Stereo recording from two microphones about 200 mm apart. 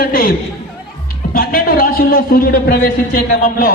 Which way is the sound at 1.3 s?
45° left (ahead or behind).